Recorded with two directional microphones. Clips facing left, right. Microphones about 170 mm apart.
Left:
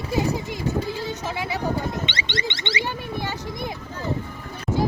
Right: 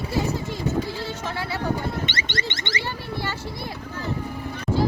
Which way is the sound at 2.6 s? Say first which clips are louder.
Left 3 dB; 15° left (ahead or behind).